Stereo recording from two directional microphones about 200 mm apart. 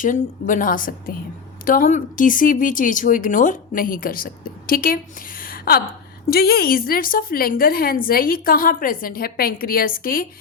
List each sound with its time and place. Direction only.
0.0 s a woman's voice: 40° left (ahead or behind)